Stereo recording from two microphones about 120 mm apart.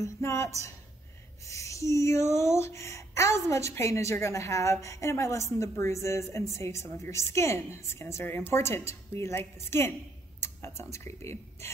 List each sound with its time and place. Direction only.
0.0 s speech: 25° left (ahead or behind)